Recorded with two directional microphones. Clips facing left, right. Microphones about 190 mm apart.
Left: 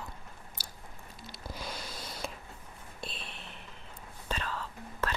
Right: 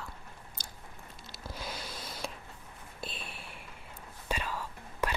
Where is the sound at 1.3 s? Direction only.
5° right (ahead or behind).